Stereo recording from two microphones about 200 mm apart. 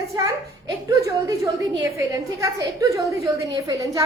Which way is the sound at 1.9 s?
15° right (ahead or behind).